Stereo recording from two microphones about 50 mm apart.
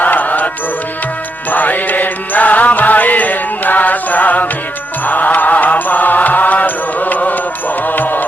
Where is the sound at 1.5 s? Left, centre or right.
Left.